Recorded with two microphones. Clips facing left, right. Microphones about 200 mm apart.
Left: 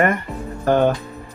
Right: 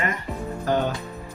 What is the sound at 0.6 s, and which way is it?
Music, 60° left (ahead or behind).